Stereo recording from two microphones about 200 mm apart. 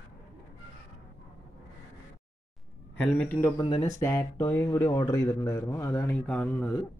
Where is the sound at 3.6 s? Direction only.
25° left (ahead or behind).